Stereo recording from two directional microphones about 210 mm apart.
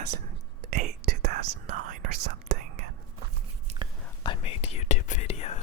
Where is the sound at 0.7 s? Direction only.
35° right (ahead or behind).